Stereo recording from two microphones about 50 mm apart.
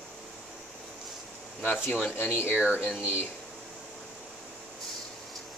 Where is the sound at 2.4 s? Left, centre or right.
Right.